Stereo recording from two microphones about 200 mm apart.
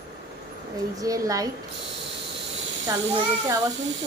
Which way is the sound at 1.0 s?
15° right (ahead or behind).